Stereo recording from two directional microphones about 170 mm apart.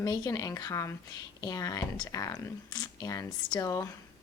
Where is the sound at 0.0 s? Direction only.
20° left (ahead or behind).